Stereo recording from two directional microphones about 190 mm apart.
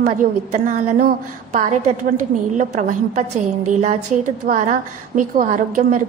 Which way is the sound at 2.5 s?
35° right (ahead or behind).